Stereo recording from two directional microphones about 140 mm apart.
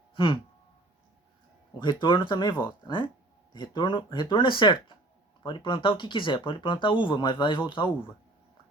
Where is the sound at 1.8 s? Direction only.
35° left (ahead or behind).